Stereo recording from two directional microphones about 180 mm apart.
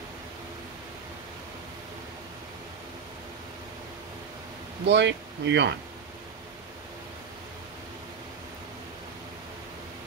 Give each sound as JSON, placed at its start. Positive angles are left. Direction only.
{"t": 4.8, "sound": "speech", "side_deg": -75}